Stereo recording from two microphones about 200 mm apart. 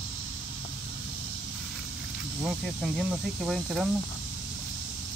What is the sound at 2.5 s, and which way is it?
Speech, centre (ahead or behind).